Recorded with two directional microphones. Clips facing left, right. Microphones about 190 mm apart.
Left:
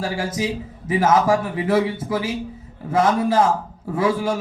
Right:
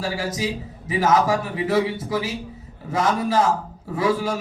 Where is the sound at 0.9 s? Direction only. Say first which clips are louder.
Left 2 dB; 50° left (ahead or behind).